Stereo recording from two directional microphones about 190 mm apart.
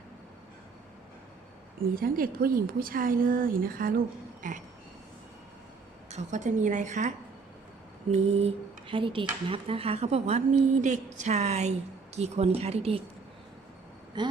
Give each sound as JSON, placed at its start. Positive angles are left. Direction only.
{"t": 1.8, "sound": "a woman's voice", "side_deg": -50}
{"t": 6.1, "sound": "speech", "side_deg": -40}
{"t": 8.1, "sound": "speech", "side_deg": -35}
{"t": 14.2, "sound": "speech", "side_deg": -25}